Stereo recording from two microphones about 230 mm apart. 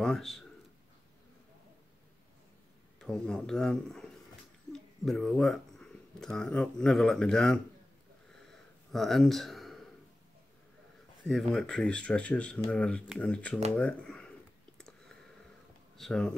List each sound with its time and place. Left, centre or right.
0.0 s speech: centre
3.0 s speech: centre
8.9 s speech: centre
11.5 s speech: centre
14.8 s a sound: centre
16.0 s speech: centre